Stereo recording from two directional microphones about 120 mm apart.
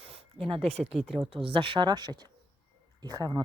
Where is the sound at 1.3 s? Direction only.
45° right (ahead or behind).